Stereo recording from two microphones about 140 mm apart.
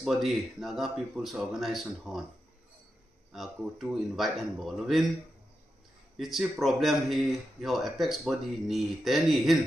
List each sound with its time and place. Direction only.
0.0 s speech: centre (ahead or behind)
3.3 s speech: centre (ahead or behind)
6.1 s speech: centre (ahead or behind)